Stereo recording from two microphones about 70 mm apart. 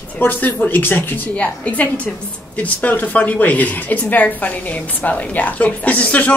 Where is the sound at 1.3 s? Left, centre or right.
Centre.